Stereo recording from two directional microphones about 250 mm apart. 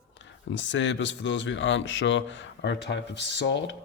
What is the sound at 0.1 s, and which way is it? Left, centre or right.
Speech, left.